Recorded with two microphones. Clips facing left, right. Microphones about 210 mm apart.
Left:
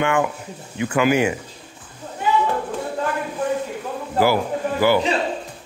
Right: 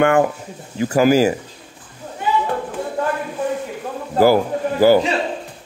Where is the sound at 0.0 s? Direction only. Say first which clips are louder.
Right 5 dB; 40° right (ahead or behind).